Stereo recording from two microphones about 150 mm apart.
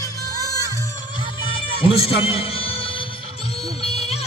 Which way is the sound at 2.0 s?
40° left (ahead or behind).